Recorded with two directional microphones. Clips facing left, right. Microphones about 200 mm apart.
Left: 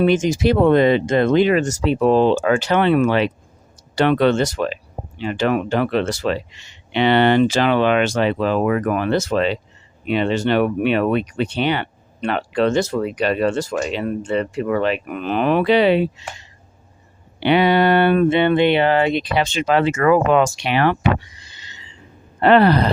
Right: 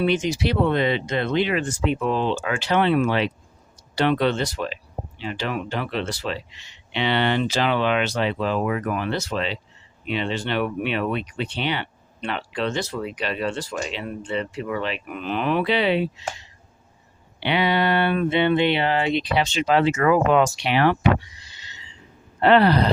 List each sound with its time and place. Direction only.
0.0 s speech: 45° left (ahead or behind)
17.4 s speech: 50° left (ahead or behind)
22.4 s speech: 50° left (ahead or behind)